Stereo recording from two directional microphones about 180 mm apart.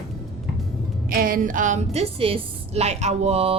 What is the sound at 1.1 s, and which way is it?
Music, 50° right (ahead or behind).